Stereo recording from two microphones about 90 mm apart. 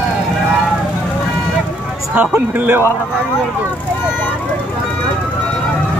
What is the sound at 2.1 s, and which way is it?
Speech, 20° right (ahead or behind).